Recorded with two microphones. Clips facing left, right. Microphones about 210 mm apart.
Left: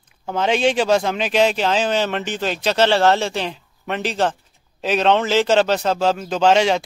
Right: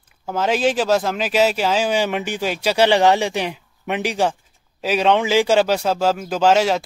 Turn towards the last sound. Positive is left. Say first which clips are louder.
# even
turn(degrees=-5)  # may be behind; listen again after turning